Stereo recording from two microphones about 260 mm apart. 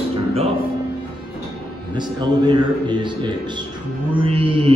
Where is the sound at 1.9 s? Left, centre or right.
Centre.